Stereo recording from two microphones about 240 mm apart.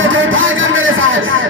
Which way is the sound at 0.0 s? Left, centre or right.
Right.